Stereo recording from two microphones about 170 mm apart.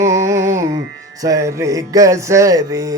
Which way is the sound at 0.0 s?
15° right (ahead or behind).